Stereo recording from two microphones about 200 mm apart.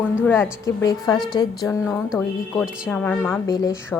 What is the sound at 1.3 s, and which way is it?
Speech, 20° left (ahead or behind).